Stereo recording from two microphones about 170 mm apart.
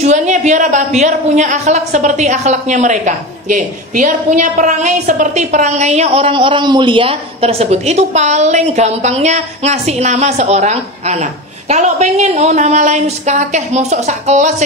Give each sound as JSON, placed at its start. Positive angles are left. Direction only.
{"t": 0.0, "sound": "a woman's voice", "side_deg": -45}